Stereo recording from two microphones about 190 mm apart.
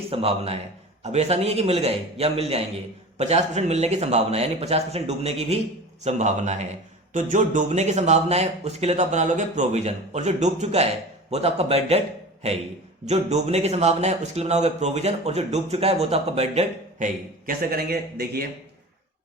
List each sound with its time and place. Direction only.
0.1 s a man's voice: 30° right (ahead or behind)
17.4 s a man's voice: 50° right (ahead or behind)